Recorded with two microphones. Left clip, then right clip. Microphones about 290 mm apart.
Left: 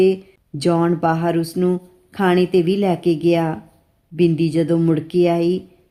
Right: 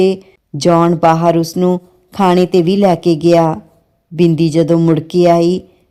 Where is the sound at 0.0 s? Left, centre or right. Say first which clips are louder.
Right 3 dB; right.